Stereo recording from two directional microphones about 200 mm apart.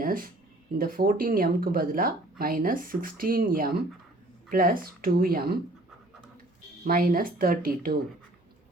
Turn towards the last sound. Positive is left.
turn(degrees=-45)  # may be behind; listen again after turning